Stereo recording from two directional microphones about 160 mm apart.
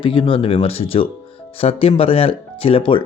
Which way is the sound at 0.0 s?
30° left (ahead or behind).